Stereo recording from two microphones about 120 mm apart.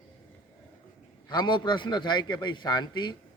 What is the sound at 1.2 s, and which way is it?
A man's voice, 40° left (ahead or behind).